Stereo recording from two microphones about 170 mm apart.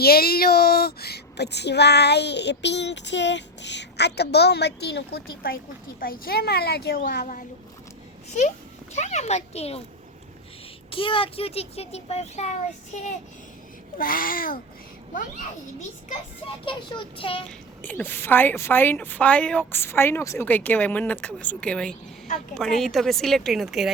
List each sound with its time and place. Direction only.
0.0 s a woman's voice: 65° left (ahead or behind)
8.4 s speech: 45° left (ahead or behind)
10.9 s a child's voice: 30° left (ahead or behind)
14.0 s a woman's voice: 55° left (ahead or behind)
16.6 s speech: 30° left (ahead or behind)
17.8 s speech: 10° left (ahead or behind)